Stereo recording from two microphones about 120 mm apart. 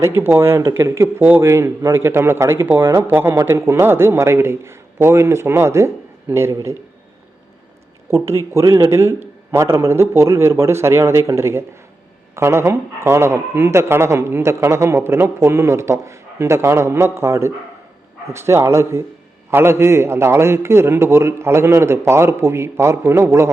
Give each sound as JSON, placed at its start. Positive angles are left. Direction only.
{"t": 0.0, "sound": "a man's voice", "side_deg": -20}
{"t": 8.1, "sound": "a man's voice", "side_deg": -25}